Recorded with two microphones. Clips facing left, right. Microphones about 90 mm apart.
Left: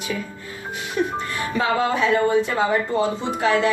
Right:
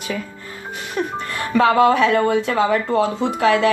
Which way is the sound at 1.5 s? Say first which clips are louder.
Right 8 dB; 75° right (ahead or behind).